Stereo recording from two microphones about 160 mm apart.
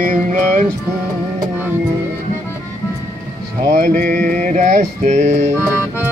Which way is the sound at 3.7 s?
55° right (ahead or behind).